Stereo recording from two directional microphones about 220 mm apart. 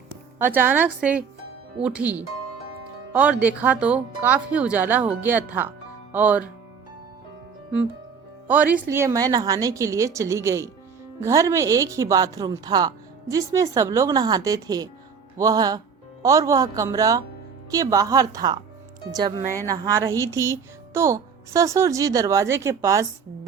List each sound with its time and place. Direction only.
0.4 s speech: 10° right (ahead or behind)
8.4 s speech: 5° right (ahead or behind)
19.4 s a woman's voice: 35° right (ahead or behind)
19.6 s speech: 15° right (ahead or behind)